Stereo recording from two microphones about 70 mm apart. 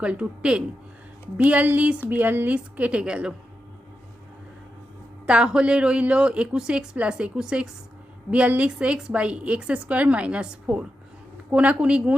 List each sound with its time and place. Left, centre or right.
0.0 s a woman's voice: centre
5.2 s a woman's voice: centre
8.3 s a woman's voice: centre